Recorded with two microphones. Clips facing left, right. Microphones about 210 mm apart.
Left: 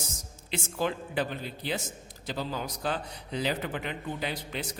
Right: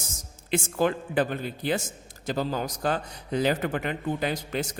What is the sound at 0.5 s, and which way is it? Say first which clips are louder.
A man's voice: right 6 dB; 50° right (ahead or behind).